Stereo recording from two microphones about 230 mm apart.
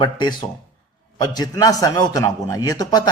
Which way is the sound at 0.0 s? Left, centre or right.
Centre.